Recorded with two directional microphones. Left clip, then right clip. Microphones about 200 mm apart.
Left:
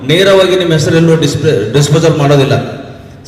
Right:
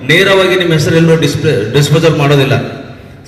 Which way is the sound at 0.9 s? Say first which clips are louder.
Even; 60° left (ahead or behind).